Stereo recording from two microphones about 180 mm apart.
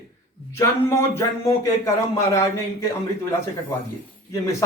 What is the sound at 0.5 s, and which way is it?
A man's voice, 15° left (ahead or behind).